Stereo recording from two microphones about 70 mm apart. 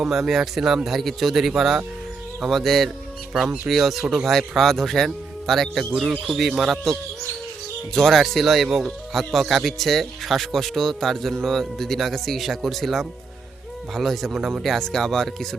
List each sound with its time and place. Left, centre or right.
0.1 s speech: centre
3.3 s speech: centre
3.7 s speech: centre
7.9 s speech: centre
14.6 s speech: centre